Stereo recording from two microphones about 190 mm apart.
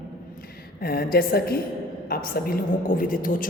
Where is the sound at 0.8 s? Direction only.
55° left (ahead or behind).